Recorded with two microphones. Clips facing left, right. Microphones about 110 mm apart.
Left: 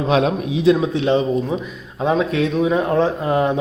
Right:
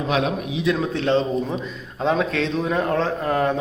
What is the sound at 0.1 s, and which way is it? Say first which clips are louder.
Speech: left 5 dB; 35° left (ahead or behind).